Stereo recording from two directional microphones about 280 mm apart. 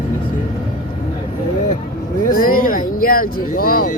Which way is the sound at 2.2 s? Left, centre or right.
Left.